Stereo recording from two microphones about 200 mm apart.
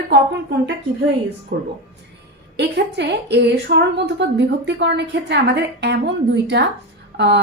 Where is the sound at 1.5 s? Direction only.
50° right (ahead or behind).